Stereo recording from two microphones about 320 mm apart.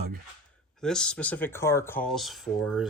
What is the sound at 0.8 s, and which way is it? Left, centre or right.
Speech, centre.